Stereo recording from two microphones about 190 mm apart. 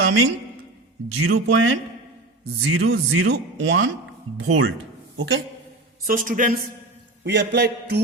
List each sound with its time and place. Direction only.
1.2 s speech: 90° right
4.4 s speech: 90° right
5.1 s a man's voice: 75° right (ahead or behind)
6.1 s a man's voice: 45° right (ahead or behind)
7.3 s mantra: 60° right (ahead or behind)